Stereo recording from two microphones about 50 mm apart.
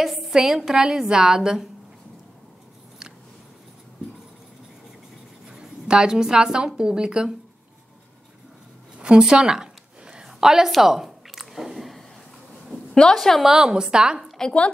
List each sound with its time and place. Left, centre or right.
0.0 s a sound: centre
0.3 s a woman's voice: centre
5.5 s a woman's voice: centre
8.9 s a sound: centre
13.1 s a woman's voice: centre
13.4 s a woman's voice: centre